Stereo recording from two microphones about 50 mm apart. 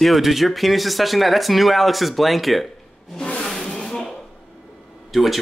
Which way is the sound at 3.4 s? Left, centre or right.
Centre.